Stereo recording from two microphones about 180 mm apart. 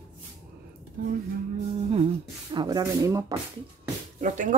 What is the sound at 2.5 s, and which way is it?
Speech, 25° right (ahead or behind).